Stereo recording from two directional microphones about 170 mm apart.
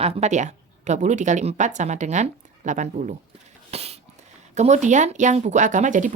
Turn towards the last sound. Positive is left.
turn(degrees=-45)  # may be behind; listen again after turning